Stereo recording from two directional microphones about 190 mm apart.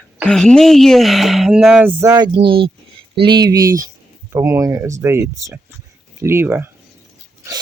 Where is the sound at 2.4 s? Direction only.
25° right (ahead or behind).